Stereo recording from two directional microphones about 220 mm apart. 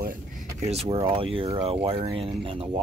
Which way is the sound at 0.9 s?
25° right (ahead or behind).